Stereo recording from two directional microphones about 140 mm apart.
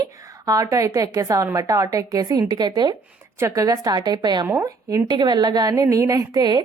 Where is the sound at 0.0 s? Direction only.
25° right (ahead or behind).